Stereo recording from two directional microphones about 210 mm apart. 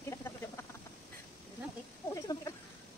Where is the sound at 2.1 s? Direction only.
15° left (ahead or behind).